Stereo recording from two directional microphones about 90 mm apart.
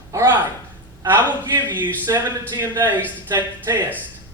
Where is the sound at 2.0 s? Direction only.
55° right (ahead or behind).